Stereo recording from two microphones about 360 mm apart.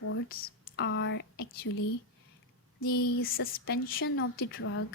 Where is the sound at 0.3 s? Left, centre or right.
Left.